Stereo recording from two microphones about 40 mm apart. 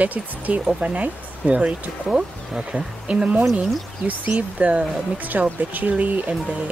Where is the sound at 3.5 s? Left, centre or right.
Right.